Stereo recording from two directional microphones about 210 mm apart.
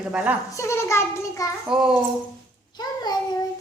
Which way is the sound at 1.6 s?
5° right (ahead or behind).